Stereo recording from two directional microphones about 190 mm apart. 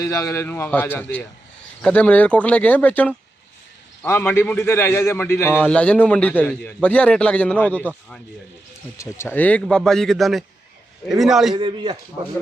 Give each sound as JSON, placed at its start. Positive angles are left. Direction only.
{"t": 0.0, "sound": "a man's voice", "side_deg": 15}
{"t": 11.5, "sound": "a man's voice", "side_deg": -25}